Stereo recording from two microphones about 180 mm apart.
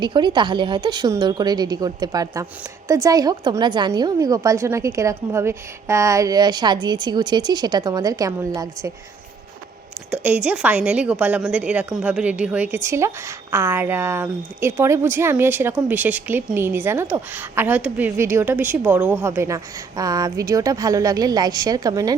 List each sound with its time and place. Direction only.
0.0 s a woman's voice: 25° right (ahead or behind)
10.1 s a woman's voice: 5° right (ahead or behind)